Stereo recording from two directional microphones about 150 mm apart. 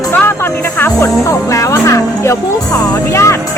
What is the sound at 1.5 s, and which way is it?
Speech, 20° left (ahead or behind).